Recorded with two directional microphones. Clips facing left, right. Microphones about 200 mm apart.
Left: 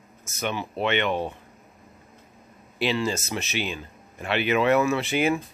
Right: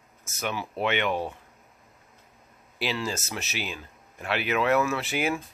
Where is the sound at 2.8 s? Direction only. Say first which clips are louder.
Left 5 dB; 5° right (ahead or behind).